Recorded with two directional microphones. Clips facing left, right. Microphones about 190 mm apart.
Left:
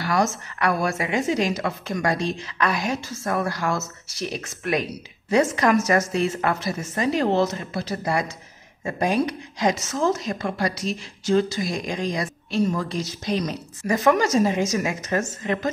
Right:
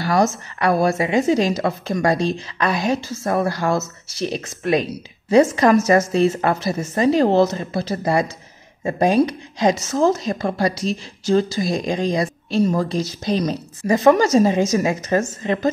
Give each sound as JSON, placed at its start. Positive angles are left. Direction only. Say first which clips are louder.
{"t": 0.0, "sound": "speech", "louder": "right 4 dB", "side_deg": -30}